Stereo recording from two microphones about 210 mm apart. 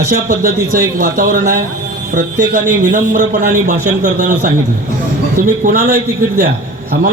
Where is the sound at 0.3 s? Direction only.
40° right (ahead or behind).